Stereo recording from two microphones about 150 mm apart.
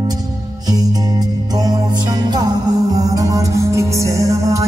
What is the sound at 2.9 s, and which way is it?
Music, 25° right (ahead or behind).